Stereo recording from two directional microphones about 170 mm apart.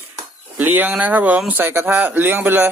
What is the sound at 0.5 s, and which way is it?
Speech, 10° right (ahead or behind).